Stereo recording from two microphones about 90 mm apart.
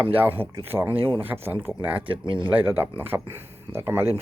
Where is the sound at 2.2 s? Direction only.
60° right (ahead or behind).